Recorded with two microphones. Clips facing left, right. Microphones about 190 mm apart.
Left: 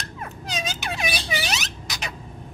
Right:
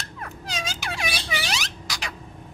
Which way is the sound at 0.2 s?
20° left (ahead or behind).